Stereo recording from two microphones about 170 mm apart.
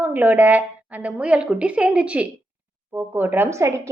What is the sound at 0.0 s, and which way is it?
A woman's voice, 10° right (ahead or behind).